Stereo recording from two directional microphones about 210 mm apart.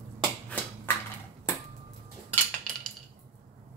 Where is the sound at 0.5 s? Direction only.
5° left (ahead or behind).